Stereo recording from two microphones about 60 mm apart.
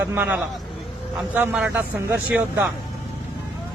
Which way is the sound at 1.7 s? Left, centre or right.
Right.